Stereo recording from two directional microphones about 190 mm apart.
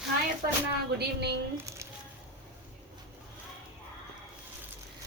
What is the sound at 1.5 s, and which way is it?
Speech, 15° right (ahead or behind).